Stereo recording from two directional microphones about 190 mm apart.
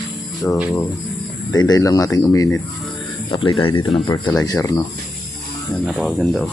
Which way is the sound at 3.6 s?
25° left (ahead or behind).